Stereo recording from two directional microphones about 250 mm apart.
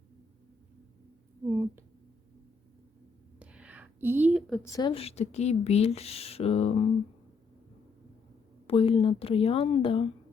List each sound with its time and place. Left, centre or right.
1.5 s speech: centre
3.3 s a sound: centre
4.7 s speech: centre
8.6 s speech: left